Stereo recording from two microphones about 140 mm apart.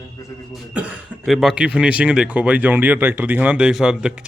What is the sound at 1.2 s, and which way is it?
A man's voice, centre (ahead or behind).